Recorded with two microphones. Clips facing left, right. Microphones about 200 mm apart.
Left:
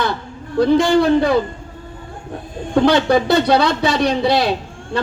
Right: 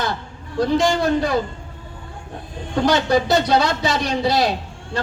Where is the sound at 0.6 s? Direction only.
60° left (ahead or behind).